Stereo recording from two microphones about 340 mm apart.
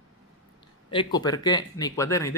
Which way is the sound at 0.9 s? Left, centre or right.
Centre.